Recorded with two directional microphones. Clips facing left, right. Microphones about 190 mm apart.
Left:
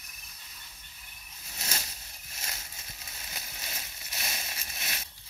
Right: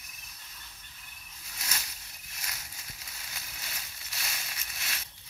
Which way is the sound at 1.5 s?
30° left (ahead or behind).